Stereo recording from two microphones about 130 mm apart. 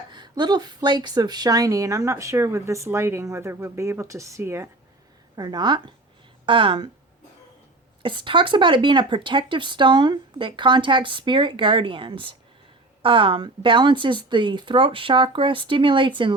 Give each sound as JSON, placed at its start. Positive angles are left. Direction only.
{"t": 0.1, "sound": "speech", "side_deg": -35}
{"t": 5.4, "sound": "speech", "side_deg": -30}
{"t": 8.0, "sound": "speech", "side_deg": -40}